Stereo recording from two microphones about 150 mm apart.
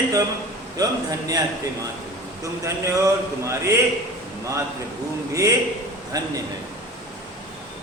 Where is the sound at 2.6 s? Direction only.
20° right (ahead or behind).